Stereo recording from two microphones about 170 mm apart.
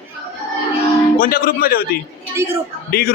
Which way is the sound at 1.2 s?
60° left (ahead or behind).